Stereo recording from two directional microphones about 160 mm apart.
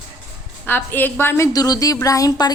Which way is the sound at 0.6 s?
10° left (ahead or behind).